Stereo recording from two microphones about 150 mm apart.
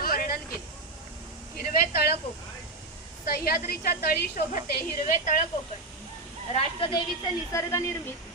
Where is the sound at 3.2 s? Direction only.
80° left; by 5.4 s 60° left (ahead or behind).